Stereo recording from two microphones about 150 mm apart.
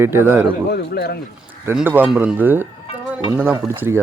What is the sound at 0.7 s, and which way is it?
Speech, 90° left.